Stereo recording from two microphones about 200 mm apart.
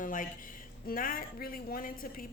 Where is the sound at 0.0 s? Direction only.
40° left (ahead or behind).